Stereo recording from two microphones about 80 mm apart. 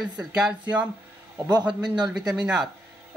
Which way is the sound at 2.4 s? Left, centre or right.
Centre.